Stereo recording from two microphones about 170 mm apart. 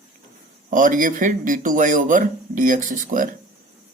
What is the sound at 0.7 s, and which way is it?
Speech, 50° right (ahead or behind).